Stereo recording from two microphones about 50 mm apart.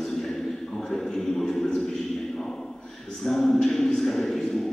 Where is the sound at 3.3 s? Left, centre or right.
Centre.